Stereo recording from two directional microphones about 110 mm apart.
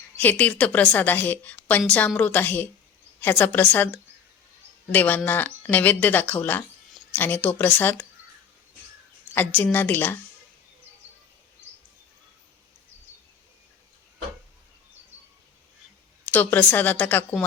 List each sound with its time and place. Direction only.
0.2 s a woman's voice: 15° left (ahead or behind)
9.3 s a woman's voice: 20° left (ahead or behind)
16.3 s a woman's voice: 15° left (ahead or behind)